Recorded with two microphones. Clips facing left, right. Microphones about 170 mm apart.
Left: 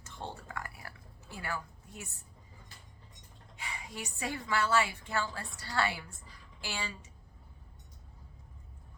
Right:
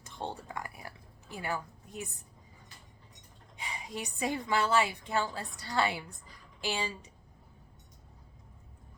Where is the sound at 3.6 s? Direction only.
20° right (ahead or behind).